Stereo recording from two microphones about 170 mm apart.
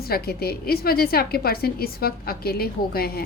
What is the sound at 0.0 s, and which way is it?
A woman's voice, 65° left (ahead or behind).